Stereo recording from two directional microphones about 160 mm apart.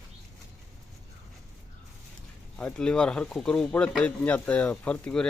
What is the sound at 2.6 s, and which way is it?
Speech, 5° left (ahead or behind).